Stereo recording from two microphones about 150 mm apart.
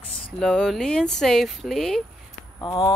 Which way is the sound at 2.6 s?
35° left (ahead or behind).